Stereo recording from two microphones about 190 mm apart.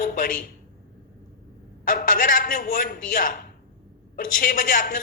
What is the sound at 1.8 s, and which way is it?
A woman's voice, 45° left (ahead or behind).